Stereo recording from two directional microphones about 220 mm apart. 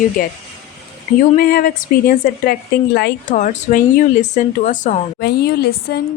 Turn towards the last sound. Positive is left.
turn(degrees=45)  # may be behind; listen again after turning